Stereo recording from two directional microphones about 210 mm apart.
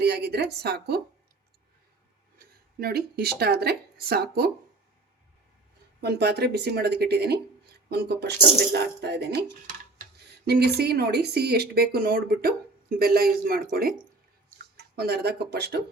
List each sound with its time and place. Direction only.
0.0 s speech: 50° right (ahead or behind)
2.4 s speech: 45° right (ahead or behind)
6.0 s speech: 50° right (ahead or behind)
14.9 s speech: 50° right (ahead or behind)